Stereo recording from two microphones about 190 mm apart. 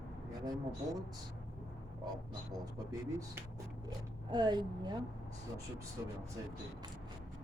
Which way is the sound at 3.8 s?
20° right (ahead or behind).